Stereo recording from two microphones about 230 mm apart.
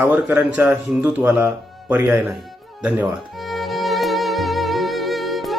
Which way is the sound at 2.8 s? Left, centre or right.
Centre.